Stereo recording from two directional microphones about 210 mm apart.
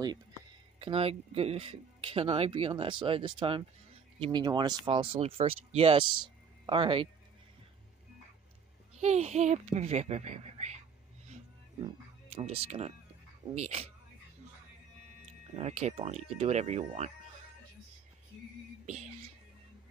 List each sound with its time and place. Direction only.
0.7 s speech: 25° right (ahead or behind)
9.0 s a woman's voice: 35° right (ahead or behind)
11.8 s speech: 30° right (ahead or behind)
15.5 s a woman's voice: 30° right (ahead or behind)
18.9 s speech: 35° right (ahead or behind)